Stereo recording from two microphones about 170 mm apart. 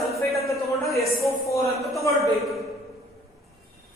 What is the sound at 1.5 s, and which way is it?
Speech, 20° left (ahead or behind).